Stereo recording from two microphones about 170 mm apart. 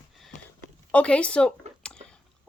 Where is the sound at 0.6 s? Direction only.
10° left (ahead or behind).